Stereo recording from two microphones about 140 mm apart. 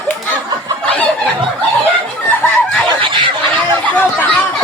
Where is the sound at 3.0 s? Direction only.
40° right (ahead or behind).